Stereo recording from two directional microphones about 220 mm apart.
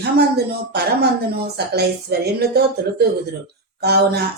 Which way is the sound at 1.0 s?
45° right (ahead or behind).